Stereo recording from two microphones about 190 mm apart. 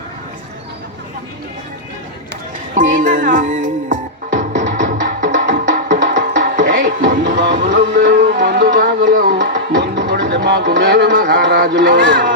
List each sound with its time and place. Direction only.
2.7 s music: 45° right (ahead or behind)
10.2 s music: 65° right (ahead or behind)
10.6 s speech: 60° right (ahead or behind)